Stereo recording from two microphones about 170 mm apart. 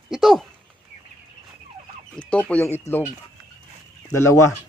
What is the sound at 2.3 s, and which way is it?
Speech, 5° left (ahead or behind).